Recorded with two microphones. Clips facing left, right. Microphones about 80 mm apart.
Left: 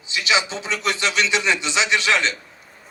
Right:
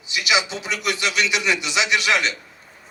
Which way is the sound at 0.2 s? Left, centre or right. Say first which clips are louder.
Even; left.